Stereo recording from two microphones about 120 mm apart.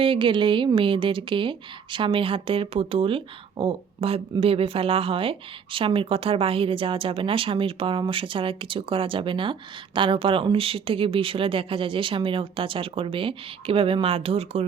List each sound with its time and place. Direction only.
0.0 s a woman's voice: 45° right (ahead or behind)